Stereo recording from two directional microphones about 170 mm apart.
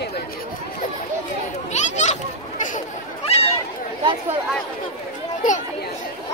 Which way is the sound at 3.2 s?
35° left (ahead or behind).